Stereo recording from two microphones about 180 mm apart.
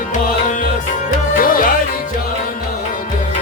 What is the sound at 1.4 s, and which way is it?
Music, 50° left (ahead or behind).